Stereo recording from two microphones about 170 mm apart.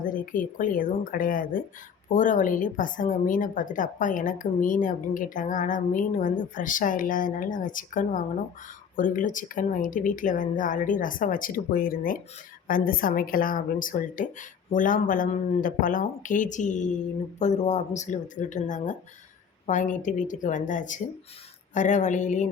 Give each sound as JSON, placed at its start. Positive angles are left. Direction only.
{"t": 0.0, "sound": "a woman's voice", "side_deg": 55}